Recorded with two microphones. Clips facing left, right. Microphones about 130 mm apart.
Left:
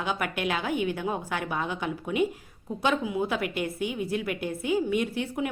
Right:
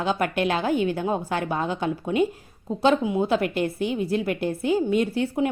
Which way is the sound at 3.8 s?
15° left (ahead or behind).